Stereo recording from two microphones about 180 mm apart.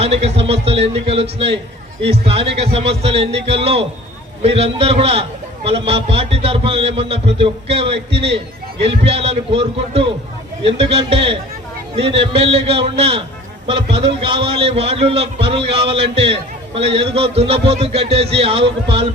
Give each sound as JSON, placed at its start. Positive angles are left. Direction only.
{"t": 0.0, "sound": "a man's voice", "side_deg": -35}